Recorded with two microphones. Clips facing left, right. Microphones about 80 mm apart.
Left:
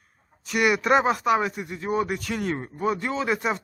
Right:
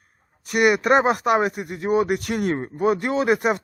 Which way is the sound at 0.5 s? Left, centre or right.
Right.